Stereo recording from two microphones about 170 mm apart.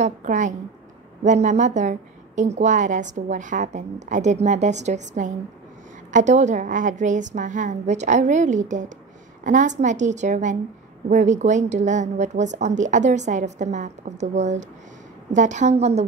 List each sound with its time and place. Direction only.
0.0 s a woman's voice: 45° right (ahead or behind)